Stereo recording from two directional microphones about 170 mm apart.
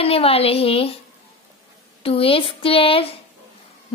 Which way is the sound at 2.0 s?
35° left (ahead or behind).